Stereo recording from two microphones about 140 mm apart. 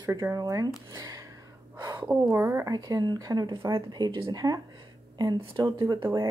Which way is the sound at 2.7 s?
30° right (ahead or behind).